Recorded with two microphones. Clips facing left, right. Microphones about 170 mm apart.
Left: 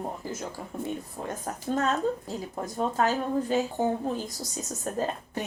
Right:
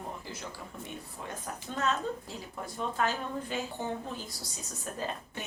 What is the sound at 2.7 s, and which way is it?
Speech, 40° left (ahead or behind).